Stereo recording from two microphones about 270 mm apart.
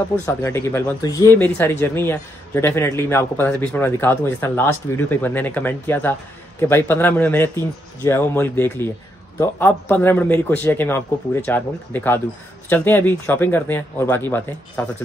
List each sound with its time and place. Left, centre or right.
0.2 s speech: centre